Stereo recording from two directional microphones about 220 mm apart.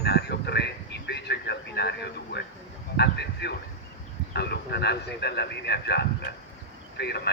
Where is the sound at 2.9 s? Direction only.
50° left (ahead or behind).